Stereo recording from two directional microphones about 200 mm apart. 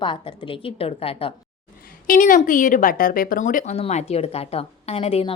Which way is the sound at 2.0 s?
40° left (ahead or behind).